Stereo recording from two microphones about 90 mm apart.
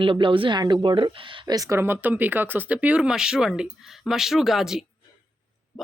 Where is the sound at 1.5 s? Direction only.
40° right (ahead or behind); by 4.8 s 5° right (ahead or behind).